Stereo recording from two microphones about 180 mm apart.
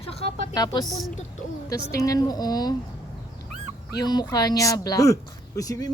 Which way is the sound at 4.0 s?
20° left (ahead or behind).